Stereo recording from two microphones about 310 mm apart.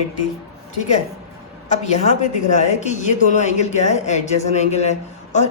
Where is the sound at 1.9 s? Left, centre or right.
Left.